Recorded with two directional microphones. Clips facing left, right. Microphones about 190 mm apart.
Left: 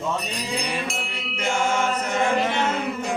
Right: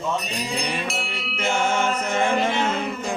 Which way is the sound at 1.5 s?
25° right (ahead or behind).